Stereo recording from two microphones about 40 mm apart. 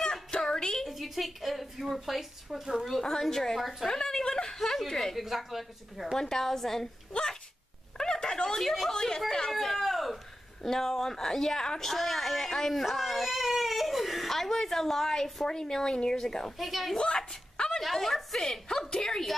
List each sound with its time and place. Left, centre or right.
0.0 s music: centre
0.8 s a woman's voice: centre
2.8 s a woman's voice: centre
5.2 s a woman's voice: centre
6.1 s a woman's voice: centre
7.1 s speech: centre
8.0 s a sound: centre
8.5 s a woman's voice: centre
12.8 s baby cry: centre
15.4 s a woman's voice: centre
16.5 s a woman's voice: centre
16.9 s a woman's voice: centre
17.2 s a sound: centre
17.7 s a woman's voice: centre